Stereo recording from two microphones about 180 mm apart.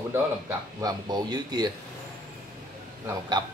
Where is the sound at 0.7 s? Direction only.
20° right (ahead or behind).